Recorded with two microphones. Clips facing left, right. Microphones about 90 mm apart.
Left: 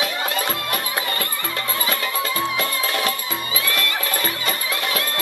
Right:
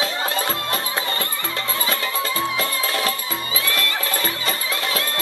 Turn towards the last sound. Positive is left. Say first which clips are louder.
# even
turn(degrees=-30)  # may be behind; listen again after turning